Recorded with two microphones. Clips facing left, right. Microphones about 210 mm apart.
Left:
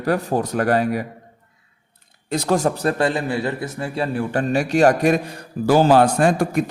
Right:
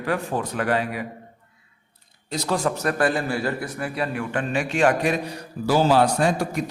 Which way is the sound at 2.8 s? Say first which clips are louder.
Left 2 dB; 25° left (ahead or behind).